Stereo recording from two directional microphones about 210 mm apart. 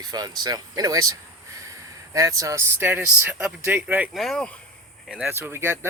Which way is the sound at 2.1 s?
15° right (ahead or behind).